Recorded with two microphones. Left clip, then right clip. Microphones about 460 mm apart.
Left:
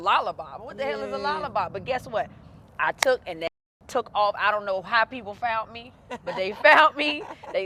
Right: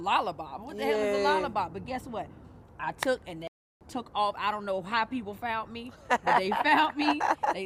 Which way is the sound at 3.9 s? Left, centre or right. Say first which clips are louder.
Left 6 dB; left.